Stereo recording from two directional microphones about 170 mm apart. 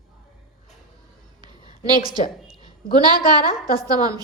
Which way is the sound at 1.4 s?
25° right (ahead or behind).